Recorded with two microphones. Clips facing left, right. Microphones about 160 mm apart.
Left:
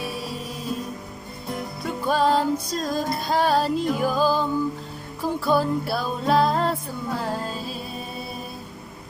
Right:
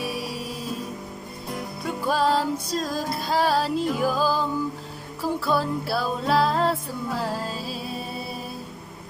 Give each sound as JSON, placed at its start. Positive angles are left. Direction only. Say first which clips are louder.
{"t": 0.0, "sound": "music", "louder": "right 1 dB", "side_deg": -10}
{"t": 1.8, "sound": "music", "louder": "left 1 dB", "side_deg": -5}